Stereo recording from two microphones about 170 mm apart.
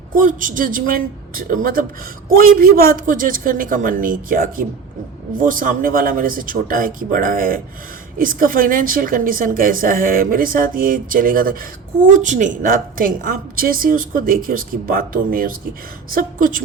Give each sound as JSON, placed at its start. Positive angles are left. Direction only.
{"t": 0.1, "sound": "a woman's voice", "side_deg": -55}